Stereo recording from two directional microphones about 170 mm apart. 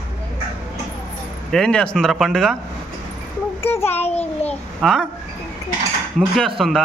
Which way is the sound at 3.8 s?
40° left (ahead or behind).